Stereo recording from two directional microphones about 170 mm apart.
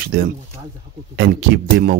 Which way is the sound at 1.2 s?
75° right (ahead or behind).